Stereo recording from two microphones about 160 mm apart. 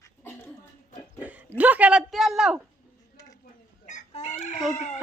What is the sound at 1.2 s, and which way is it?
Speech, 10° right (ahead or behind).